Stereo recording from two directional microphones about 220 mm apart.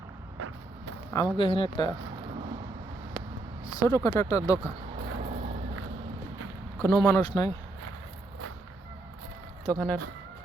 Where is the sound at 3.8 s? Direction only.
15° left (ahead or behind).